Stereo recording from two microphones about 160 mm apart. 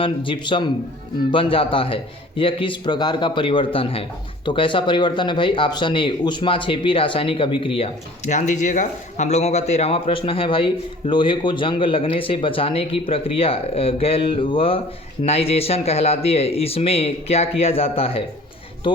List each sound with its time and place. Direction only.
0.0 s speech: 30° left (ahead or behind)